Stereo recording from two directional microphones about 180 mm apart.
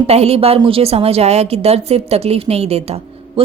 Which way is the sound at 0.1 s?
35° right (ahead or behind).